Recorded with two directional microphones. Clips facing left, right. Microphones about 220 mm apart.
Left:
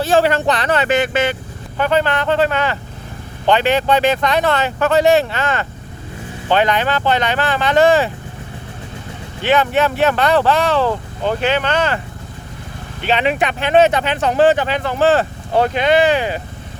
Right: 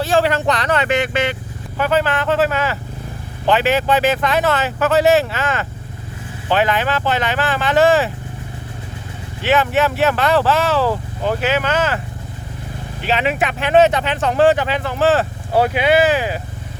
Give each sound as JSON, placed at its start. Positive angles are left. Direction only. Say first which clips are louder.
{"t": 0.0, "sound": "speech", "louder": "left 2 dB", "side_deg": 0}
{"t": 0.7, "sound": "speech", "louder": "left 3 dB", "side_deg": 35}
{"t": 1.8, "sound": "speech", "louder": "left 1 dB", "side_deg": -5}
{"t": 9.4, "sound": "speech", "louder": "left 1 dB", "side_deg": 0}
{"t": 13.0, "sound": "speech", "louder": "left 2 dB", "side_deg": 0}